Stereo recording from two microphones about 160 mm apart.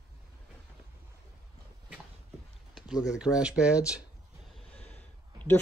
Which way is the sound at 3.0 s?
5° right (ahead or behind).